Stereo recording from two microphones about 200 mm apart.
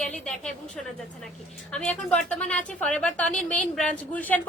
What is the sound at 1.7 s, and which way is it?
A woman's voice, 5° left (ahead or behind).